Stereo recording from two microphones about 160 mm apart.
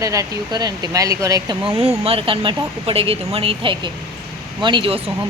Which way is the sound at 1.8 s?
35° right (ahead or behind).